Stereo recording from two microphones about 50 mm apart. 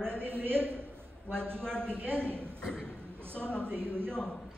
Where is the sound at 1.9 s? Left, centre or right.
Right.